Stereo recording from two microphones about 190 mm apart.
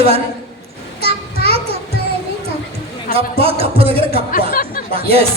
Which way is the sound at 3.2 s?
30° right (ahead or behind).